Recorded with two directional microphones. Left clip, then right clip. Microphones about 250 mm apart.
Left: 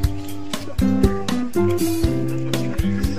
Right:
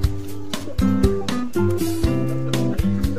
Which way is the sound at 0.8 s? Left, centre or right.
Centre.